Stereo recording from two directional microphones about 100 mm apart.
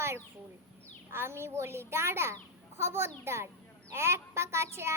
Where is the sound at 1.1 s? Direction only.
25° right (ahead or behind).